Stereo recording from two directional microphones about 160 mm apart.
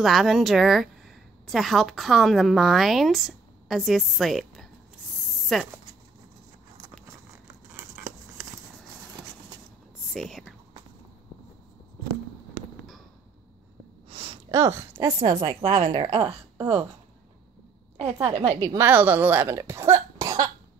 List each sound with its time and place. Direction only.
0.0 s a woman's voice: centre (ahead or behind)
7.7 s a sound: 20° right (ahead or behind)
10.1 s speech: centre (ahead or behind)
14.0 s a sound: 35° right (ahead or behind)
14.5 s speech: 20° right (ahead or behind)
15.6 s a woman's voice: 40° right (ahead or behind)
15.9 s speech: 25° right (ahead or behind)
18.0 s speech: 15° right (ahead or behind)
18.3 s a woman's voice: 35° right (ahead or behind)
18.6 s speech: 20° right (ahead or behind)